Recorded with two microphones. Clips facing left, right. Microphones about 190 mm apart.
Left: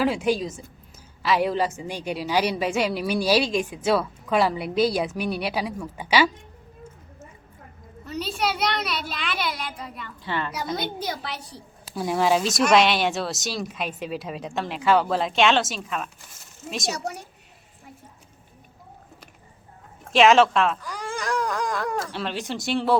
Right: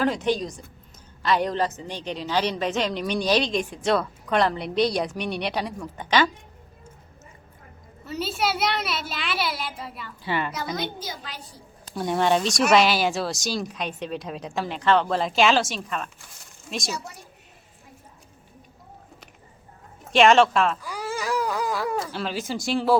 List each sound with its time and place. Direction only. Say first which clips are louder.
0.0 s a woman's voice: left 1 dB; 10° left (ahead or behind)
8.0 s speech: even; 5° right (ahead or behind)
11.0 s a woman's voice: left 6 dB; 70° left (ahead or behind)
11.9 s speech: even; centre (ahead or behind)
16.9 s a woman's voice: left 3 dB; 70° left (ahead or behind)
20.1 s speech: even; centre (ahead or behind)